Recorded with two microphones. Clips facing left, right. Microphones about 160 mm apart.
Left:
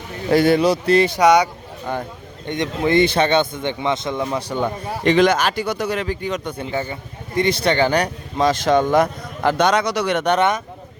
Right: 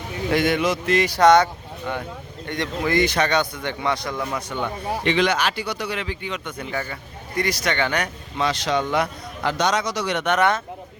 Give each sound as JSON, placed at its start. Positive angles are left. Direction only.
{"t": 0.3, "sound": "speech", "side_deg": 35}
{"t": 1.1, "sound": "speech", "side_deg": 10}
{"t": 1.9, "sound": "speech", "side_deg": 40}
{"t": 2.5, "sound": "speech", "side_deg": 25}
{"t": 6.6, "sound": "a man's voice", "side_deg": 20}
{"t": 10.2, "sound": "speech", "side_deg": 30}